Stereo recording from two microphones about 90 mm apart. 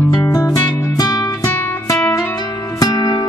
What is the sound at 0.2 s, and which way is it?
Music, 45° left (ahead or behind).